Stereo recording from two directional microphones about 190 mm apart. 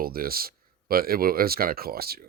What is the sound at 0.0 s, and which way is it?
Speech, 50° right (ahead or behind).